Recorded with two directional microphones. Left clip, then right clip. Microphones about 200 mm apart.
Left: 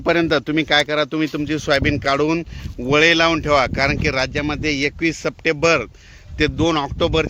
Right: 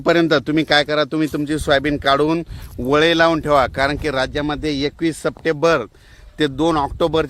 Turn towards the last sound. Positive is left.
turn(degrees=-35)  # may be behind; listen again after turning